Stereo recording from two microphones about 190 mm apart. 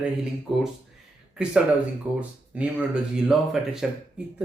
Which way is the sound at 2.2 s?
5° right (ahead or behind).